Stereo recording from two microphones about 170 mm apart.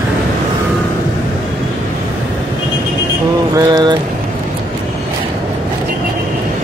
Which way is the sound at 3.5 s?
25° right (ahead or behind).